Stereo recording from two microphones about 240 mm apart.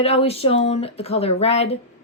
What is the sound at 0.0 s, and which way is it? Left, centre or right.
Speech, left.